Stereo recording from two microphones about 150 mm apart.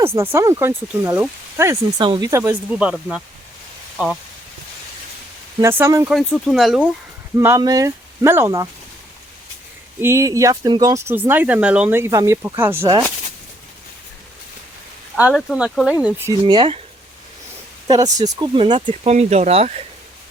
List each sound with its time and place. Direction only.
0.0 s speech: 15° right (ahead or behind)
2.0 s speech: 30° right (ahead or behind)
2.7 s speech: 5° right (ahead or behind)
5.5 s speech: 15° right (ahead or behind)
6.1 s speech: centre (ahead or behind)
7.3 s speech: 20° right (ahead or behind)
10.0 s speech: 20° right (ahead or behind)
15.3 s speech: centre (ahead or behind)
16.3 s speech: 25° right (ahead or behind)
17.8 s speech: 25° right (ahead or behind)
19.0 s speech: 45° right (ahead or behind)